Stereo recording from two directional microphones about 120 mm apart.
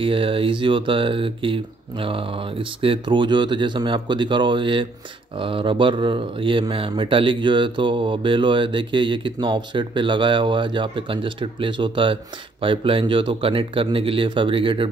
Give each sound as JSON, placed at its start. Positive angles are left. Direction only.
{"t": 0.0, "sound": "speech", "side_deg": -50}